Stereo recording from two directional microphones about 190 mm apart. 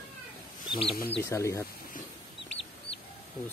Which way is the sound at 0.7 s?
30° left (ahead or behind).